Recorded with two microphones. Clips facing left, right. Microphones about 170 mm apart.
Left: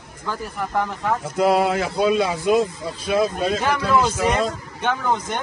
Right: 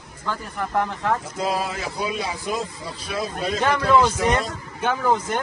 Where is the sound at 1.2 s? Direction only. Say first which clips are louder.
Left 7 dB; 65° left (ahead or behind).